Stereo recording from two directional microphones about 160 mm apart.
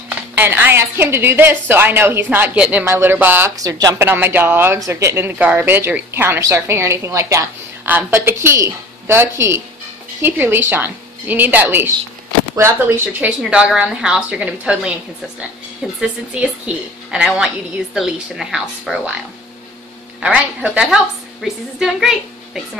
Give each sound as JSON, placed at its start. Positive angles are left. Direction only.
{"t": 0.3, "sound": "a man's voice", "side_deg": -10}
{"t": 13.4, "sound": "a woman's voice", "side_deg": -5}
{"t": 16.0, "sound": "a woman's voice", "side_deg": -5}
{"t": 20.2, "sound": "a woman's voice", "side_deg": -5}